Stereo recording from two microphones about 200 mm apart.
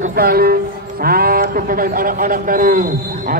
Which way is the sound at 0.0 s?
50° right (ahead or behind).